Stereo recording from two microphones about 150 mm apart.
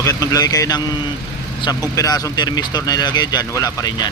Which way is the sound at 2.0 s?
25° left (ahead or behind).